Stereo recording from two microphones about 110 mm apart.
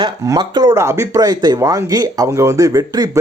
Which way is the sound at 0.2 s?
30° right (ahead or behind).